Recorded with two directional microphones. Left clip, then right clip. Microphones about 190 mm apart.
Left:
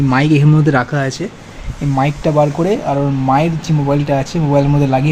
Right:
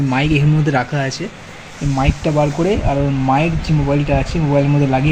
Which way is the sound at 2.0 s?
15° left (ahead or behind).